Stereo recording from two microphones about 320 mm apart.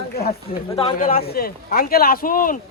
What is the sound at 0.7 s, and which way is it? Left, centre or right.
Speech, centre.